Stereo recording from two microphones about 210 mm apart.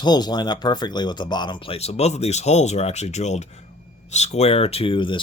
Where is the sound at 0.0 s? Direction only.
20° left (ahead or behind).